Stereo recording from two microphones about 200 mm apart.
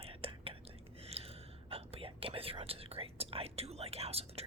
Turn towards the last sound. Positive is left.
turn(degrees=-30)  # may be behind; listen again after turning